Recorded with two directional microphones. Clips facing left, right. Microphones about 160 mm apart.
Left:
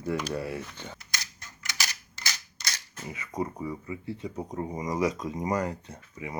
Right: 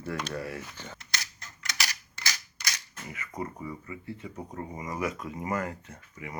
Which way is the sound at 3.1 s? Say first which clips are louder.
Left 4 dB; 15° left (ahead or behind).